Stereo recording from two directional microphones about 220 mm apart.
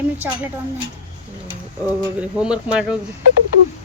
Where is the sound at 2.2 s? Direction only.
5° right (ahead or behind).